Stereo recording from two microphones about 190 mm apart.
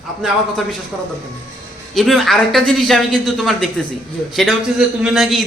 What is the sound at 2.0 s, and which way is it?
A man's voice, centre (ahead or behind).